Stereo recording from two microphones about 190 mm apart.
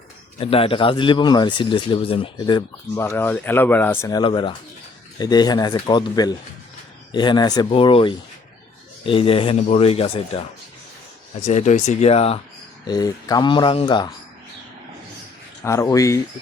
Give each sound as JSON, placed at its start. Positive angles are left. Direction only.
{"t": 0.3, "sound": "speech", "side_deg": 30}
{"t": 2.9, "sound": "speech", "side_deg": 10}
{"t": 4.2, "sound": "speech", "side_deg": 25}
{"t": 11.4, "sound": "speech", "side_deg": 40}
{"t": 12.9, "sound": "speech", "side_deg": 20}
{"t": 15.6, "sound": "speech", "side_deg": 15}